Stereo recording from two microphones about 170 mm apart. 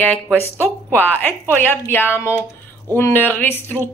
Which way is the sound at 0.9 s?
10° left (ahead or behind).